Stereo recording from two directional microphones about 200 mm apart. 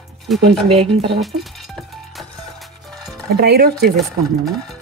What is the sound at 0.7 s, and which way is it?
Speech, 30° right (ahead or behind).